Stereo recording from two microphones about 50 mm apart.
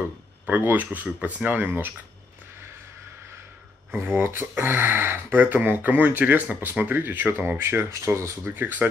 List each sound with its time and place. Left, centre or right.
0.5 s speech: right
3.9 s speech: right
7.9 s speech: right
8.5 s speech: right